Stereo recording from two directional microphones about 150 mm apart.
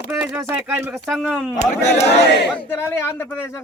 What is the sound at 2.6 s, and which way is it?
Speech, 15° left (ahead or behind).